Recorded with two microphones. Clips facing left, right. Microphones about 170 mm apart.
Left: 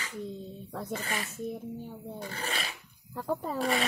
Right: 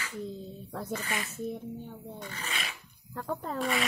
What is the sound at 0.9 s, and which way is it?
Speech, 35° left (ahead or behind).